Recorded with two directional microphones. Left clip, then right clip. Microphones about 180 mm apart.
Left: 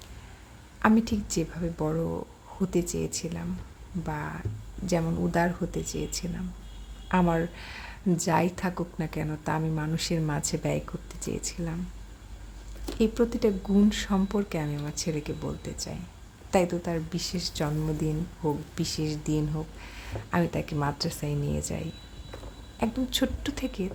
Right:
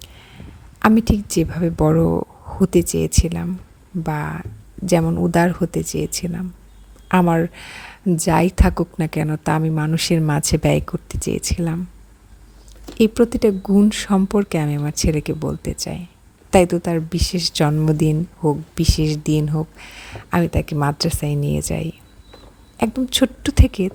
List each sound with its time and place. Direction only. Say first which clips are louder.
0.8 s speech: right 8 dB; 45° right (ahead or behind)
13.0 s speech: right 10 dB; 45° right (ahead or behind)